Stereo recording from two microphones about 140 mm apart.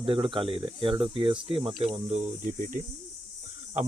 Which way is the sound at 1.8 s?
50° right (ahead or behind).